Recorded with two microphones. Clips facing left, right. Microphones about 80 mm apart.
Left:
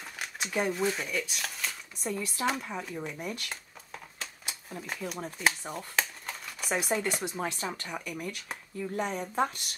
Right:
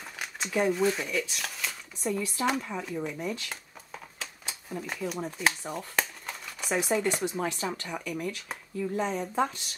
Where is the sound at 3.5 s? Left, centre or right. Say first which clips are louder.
Right 1 dB; centre.